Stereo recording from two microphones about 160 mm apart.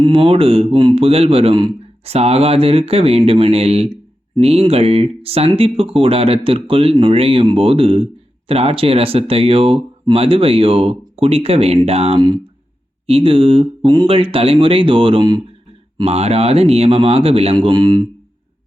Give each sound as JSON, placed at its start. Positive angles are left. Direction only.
{"t": 0.0, "sound": "speech", "side_deg": -35}
{"t": 16.0, "sound": "speech", "side_deg": -40}